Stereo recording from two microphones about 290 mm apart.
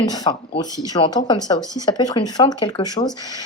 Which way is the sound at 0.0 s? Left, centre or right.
Centre.